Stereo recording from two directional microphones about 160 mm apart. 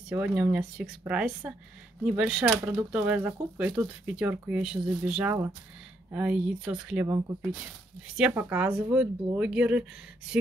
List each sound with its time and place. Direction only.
0.1 s speech: 10° right (ahead or behind)
7.1 s speech: 20° right (ahead or behind)